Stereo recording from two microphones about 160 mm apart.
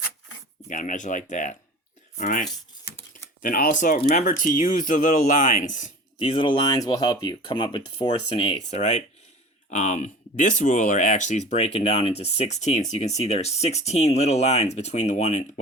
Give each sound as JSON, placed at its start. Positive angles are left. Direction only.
{"t": 0.7, "sound": "speech", "side_deg": 55}
{"t": 3.4, "sound": "speech", "side_deg": 60}
{"t": 6.1, "sound": "speech", "side_deg": 35}